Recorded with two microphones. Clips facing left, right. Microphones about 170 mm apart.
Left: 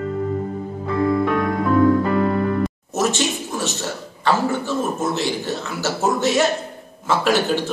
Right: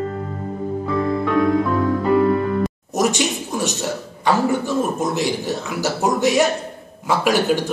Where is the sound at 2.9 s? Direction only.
15° right (ahead or behind).